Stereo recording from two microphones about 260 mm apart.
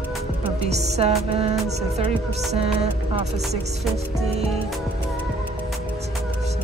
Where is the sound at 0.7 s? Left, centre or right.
Right.